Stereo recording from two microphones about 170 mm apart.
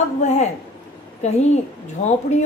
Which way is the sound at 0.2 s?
40° left (ahead or behind).